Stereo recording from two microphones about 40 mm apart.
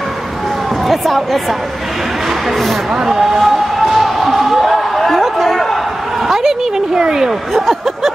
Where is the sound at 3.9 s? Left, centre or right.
Centre.